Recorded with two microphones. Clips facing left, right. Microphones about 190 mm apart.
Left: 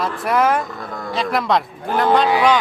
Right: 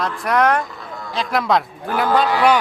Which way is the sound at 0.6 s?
50° left (ahead or behind).